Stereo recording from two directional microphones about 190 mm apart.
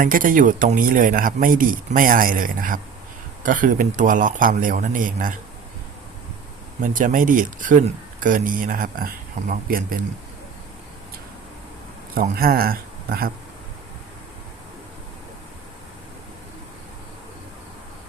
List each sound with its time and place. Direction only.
0.0 s speech: 45° right (ahead or behind)
6.8 s speech: 45° right (ahead or behind)
12.1 s a man's voice: 50° right (ahead or behind)